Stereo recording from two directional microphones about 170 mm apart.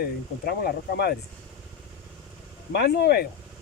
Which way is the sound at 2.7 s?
70° left (ahead or behind).